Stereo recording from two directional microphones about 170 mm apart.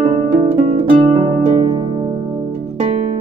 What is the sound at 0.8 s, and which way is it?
Harp, 30° right (ahead or behind).